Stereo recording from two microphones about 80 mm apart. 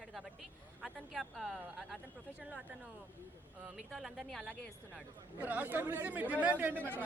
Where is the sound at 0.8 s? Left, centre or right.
Centre.